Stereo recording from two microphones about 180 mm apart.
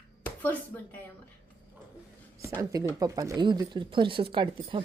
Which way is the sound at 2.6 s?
20° right (ahead or behind).